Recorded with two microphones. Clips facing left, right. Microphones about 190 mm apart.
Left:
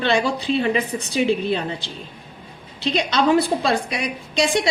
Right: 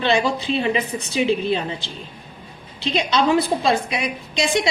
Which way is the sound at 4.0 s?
35° left (ahead or behind).